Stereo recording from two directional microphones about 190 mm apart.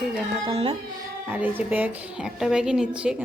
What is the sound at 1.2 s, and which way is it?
A woman's voice, 10° right (ahead or behind).